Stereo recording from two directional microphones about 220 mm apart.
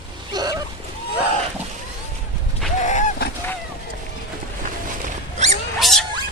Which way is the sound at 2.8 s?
35° left (ahead or behind).